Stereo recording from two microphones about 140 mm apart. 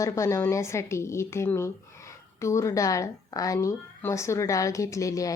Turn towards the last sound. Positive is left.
turn(degrees=25)  # may be behind; listen again after turning